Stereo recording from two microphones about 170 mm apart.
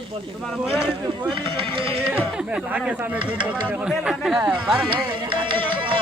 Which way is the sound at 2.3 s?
5° right (ahead or behind).